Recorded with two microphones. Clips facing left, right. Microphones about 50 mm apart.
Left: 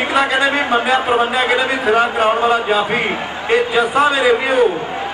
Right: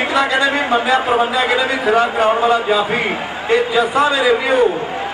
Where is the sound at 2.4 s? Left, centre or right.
Left.